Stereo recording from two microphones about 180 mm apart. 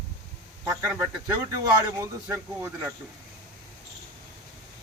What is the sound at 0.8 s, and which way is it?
Speech, 15° right (ahead or behind).